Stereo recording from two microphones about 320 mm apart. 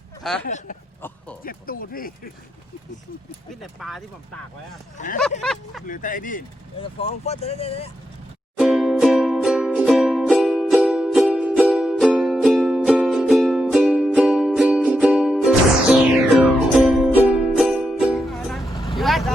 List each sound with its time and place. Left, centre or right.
0.2 s speech: centre
0.4 s speech: left
3.5 s speech: centre
4.9 s speech: left
5.4 s speech: centre
5.8 s speech: left
8.5 s music: centre
18.9 s vehicle: centre